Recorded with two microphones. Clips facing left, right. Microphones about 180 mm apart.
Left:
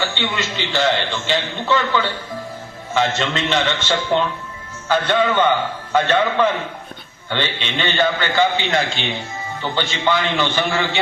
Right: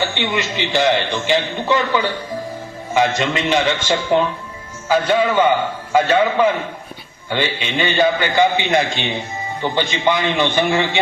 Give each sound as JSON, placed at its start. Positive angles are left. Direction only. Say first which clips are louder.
{"t": 0.1, "sound": "a man's voice", "louder": "right 3 dB", "side_deg": -15}